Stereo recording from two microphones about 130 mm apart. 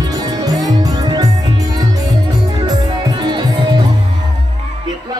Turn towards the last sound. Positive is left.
turn(degrees=-35)  # may be behind; listen again after turning